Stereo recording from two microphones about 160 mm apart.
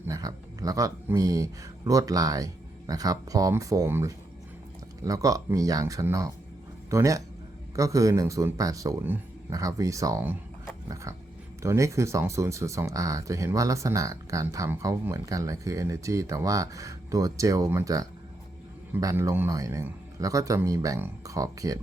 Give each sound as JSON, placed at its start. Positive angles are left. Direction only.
{"t": 0.0, "sound": "speech", "side_deg": -20}
{"t": 10.8, "sound": "dog", "side_deg": -20}
{"t": 11.6, "sound": "speech", "side_deg": -20}